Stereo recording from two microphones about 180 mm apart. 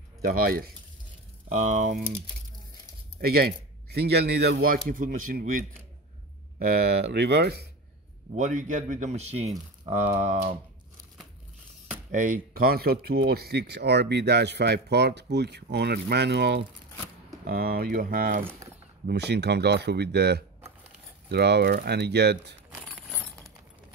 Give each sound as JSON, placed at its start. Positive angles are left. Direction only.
{"t": 0.2, "sound": "speech", "side_deg": -55}
{"t": 1.5, "sound": "speech", "side_deg": -45}
{"t": 3.2, "sound": "speech", "side_deg": -60}
{"t": 4.8, "sound": "speech", "side_deg": -50}
{"t": 6.8, "sound": "speech", "side_deg": -65}
{"t": 8.4, "sound": "speech", "side_deg": -45}
{"t": 12.1, "sound": "speech", "side_deg": -45}
{"t": 17.5, "sound": "speech", "side_deg": -55}
{"t": 18.6, "sound": "a sound", "side_deg": -20}
{"t": 19.0, "sound": "speech", "side_deg": -70}